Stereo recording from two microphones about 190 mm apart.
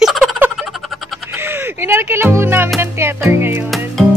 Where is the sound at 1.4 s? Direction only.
10° right (ahead or behind).